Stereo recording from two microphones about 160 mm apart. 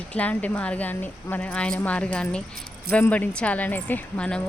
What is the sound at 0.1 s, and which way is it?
A woman's voice, 10° left (ahead or behind).